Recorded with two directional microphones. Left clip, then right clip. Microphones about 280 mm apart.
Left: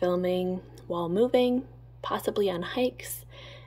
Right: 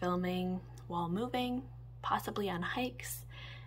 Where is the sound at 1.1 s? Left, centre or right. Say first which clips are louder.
Left 13 dB; centre.